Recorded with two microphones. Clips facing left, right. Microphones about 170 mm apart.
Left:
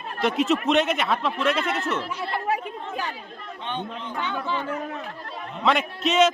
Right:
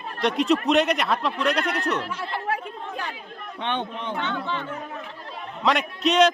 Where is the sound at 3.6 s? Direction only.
65° right (ahead or behind).